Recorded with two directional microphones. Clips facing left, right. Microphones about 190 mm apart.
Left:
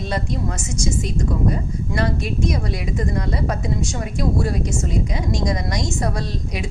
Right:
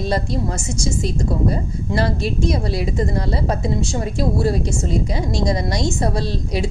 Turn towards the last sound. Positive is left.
turn(degrees=-30)  # may be behind; listen again after turning